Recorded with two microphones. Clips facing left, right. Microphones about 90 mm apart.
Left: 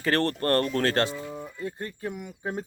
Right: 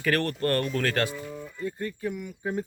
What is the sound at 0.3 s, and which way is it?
Speech, 40° left (ahead or behind).